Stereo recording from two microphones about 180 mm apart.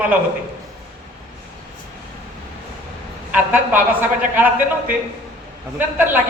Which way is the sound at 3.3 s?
10° right (ahead or behind).